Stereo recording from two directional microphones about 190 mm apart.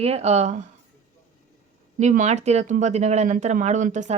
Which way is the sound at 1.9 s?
40° right (ahead or behind).